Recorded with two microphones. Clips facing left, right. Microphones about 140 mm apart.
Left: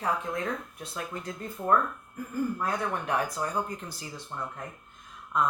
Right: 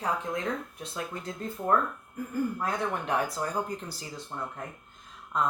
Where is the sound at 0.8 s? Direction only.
25° right (ahead or behind).